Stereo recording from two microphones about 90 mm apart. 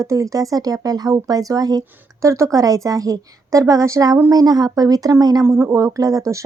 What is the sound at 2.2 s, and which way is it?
Speech, 35° right (ahead or behind).